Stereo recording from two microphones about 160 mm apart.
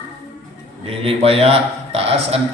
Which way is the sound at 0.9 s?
40° right (ahead or behind).